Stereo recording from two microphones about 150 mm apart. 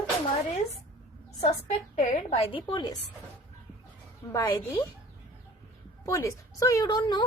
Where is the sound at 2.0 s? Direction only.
45° left (ahead or behind); by 3.0 s 30° left (ahead or behind).